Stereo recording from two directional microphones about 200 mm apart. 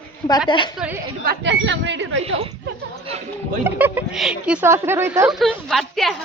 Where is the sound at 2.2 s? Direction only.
30° right (ahead or behind).